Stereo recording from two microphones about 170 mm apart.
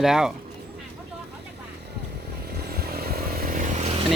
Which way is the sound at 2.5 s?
70° right (ahead or behind).